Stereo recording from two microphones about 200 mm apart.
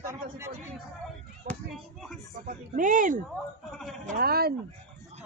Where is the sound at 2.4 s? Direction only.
40° right (ahead or behind).